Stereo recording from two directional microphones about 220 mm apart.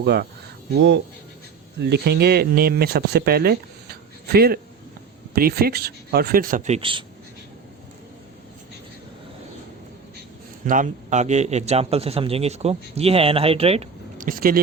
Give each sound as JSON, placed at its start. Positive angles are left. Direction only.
{"t": 0.0, "sound": "speech", "side_deg": -50}
{"t": 10.7, "sound": "a man's voice", "side_deg": -35}
{"t": 14.3, "sound": "speech", "side_deg": -40}